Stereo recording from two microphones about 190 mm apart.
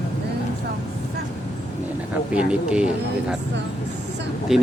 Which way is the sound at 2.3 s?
5° right (ahead or behind).